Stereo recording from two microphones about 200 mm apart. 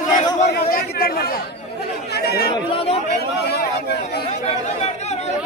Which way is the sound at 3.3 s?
55° left (ahead or behind).